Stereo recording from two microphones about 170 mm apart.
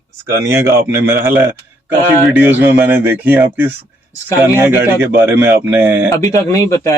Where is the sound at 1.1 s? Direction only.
15° right (ahead or behind).